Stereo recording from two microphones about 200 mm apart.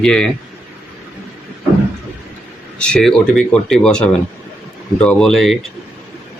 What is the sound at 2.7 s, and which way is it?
Speech, 5° left (ahead or behind).